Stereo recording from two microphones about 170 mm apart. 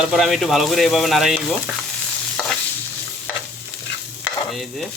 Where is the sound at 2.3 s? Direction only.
5° left (ahead or behind).